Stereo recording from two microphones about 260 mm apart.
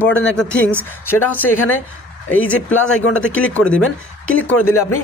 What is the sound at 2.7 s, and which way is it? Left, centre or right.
Speech, left.